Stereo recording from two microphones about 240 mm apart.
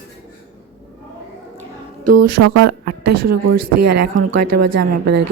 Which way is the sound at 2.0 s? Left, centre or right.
Right.